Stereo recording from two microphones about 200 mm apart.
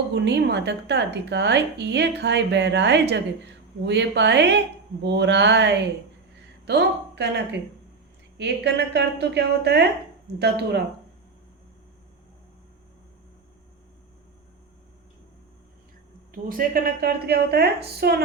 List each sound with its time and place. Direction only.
0.1 s a woman's voice: 55° right (ahead or behind)
16.3 s a woman's voice: 45° right (ahead or behind)